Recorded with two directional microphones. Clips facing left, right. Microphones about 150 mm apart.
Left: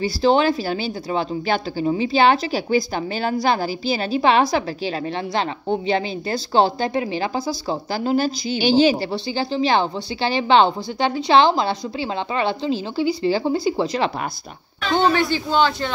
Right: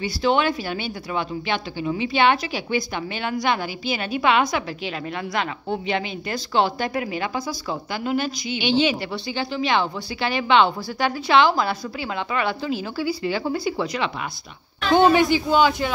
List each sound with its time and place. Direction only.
0.0 s speech: 35° left (ahead or behind)
14.9 s speech: 15° right (ahead or behind)